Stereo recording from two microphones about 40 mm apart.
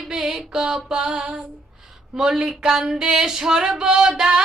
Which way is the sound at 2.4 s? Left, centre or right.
Right.